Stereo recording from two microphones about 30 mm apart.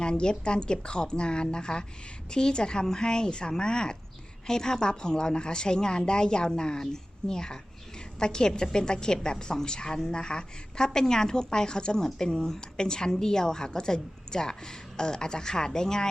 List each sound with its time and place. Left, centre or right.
0.0 s a woman's voice: left